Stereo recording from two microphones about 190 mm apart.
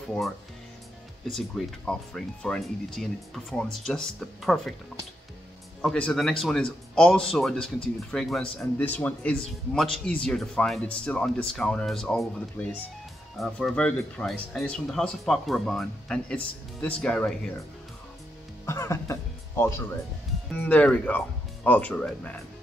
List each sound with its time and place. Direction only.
1.6 s speech: centre (ahead or behind)
5.8 s speech: 5° left (ahead or behind)
18.7 s speech: 15° left (ahead or behind)